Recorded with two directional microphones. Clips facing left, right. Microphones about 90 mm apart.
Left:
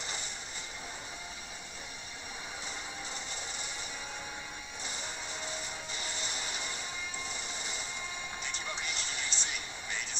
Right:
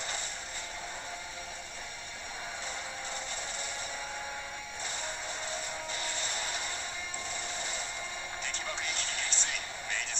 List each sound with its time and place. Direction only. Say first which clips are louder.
4.8 s music: right 3 dB; 35° right (ahead or behind)
7.5 s a sound: right 3 dB; 40° right (ahead or behind)
8.8 s music: right 2 dB; 40° right (ahead or behind)